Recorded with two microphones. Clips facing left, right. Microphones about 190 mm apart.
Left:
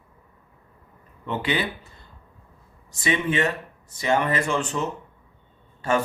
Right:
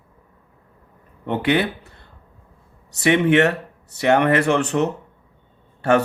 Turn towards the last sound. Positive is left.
turn(degrees=-65)  # may be behind; listen again after turning